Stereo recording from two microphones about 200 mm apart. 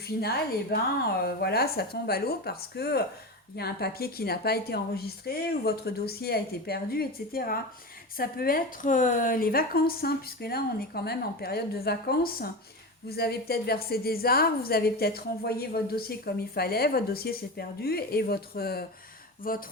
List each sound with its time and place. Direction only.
0.0 s a woman's voice: 50° left (ahead or behind)